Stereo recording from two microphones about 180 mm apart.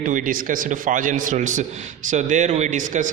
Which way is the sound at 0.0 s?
50° right (ahead or behind).